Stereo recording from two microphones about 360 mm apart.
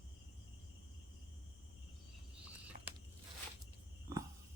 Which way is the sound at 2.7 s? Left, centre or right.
Right.